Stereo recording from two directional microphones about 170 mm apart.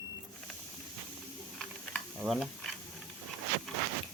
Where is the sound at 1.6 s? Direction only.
Centre (ahead or behind).